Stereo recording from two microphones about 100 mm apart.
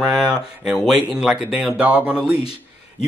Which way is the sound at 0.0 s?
5° right (ahead or behind).